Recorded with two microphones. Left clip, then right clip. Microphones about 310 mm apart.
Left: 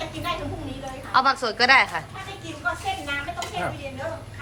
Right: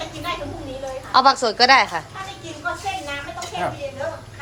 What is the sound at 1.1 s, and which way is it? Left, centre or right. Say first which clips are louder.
Speech: right 5 dB; centre.